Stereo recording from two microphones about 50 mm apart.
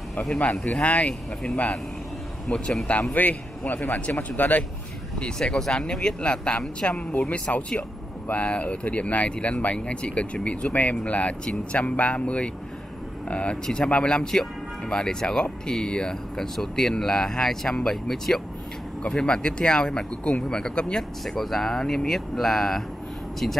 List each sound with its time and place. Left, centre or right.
0.1 s speech: left
2.9 s a man's voice: left
5.2 s speech: centre